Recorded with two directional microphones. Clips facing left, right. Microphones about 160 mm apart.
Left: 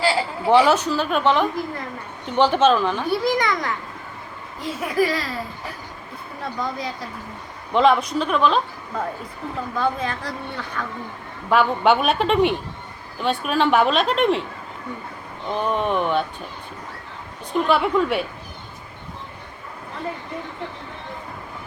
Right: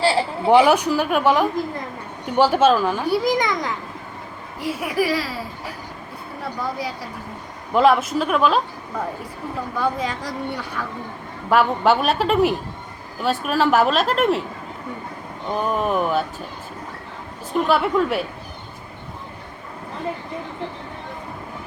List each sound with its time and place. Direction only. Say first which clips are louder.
0.0 s a sound: right 2 dB; 25° right (ahead or behind)
0.5 s a child's voice: right 2 dB; 15° right (ahead or behind)
6.6 s a child's voice: even; 10° right (ahead or behind)
15.5 s speech: right 1 dB; 5° right (ahead or behind)
17.6 s speech: even; centre (ahead or behind)